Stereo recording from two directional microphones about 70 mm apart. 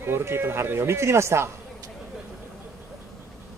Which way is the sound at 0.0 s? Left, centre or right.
Right.